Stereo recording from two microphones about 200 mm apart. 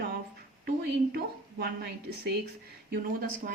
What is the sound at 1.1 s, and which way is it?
A woman's voice, 50° right (ahead or behind).